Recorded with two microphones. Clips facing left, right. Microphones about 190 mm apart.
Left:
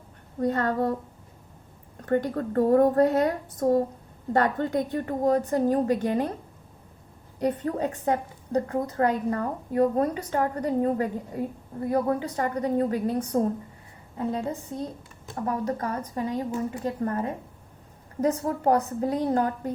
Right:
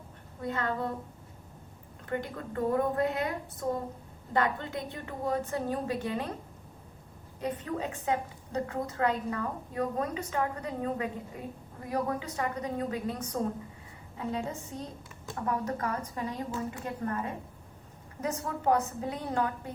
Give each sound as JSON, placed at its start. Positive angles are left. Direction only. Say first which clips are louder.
{"t": 0.3, "sound": "a woman's voice", "louder": "left 8 dB", "side_deg": 45}
{"t": 2.0, "sound": "a woman's voice", "louder": "left 10 dB", "side_deg": 45}
{"t": 7.4, "sound": "a woman's voice", "louder": "left 7 dB", "side_deg": 40}